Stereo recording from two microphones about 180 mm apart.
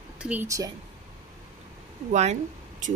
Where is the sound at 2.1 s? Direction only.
40° right (ahead or behind).